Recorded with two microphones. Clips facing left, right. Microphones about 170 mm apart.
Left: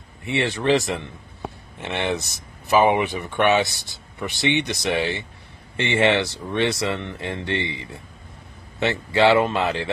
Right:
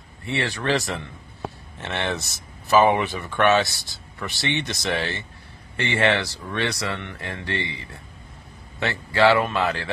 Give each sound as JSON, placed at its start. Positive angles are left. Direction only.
{"t": 0.2, "sound": "speech", "side_deg": 20}